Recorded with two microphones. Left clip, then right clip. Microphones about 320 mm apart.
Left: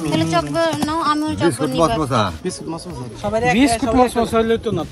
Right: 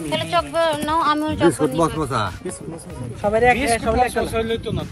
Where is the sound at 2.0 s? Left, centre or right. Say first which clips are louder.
Left 4 dB; centre.